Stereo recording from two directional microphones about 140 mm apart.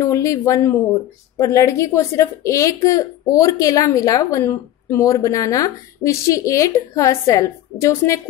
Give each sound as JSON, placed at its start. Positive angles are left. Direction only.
{"t": 0.0, "sound": "a woman's voice", "side_deg": 20}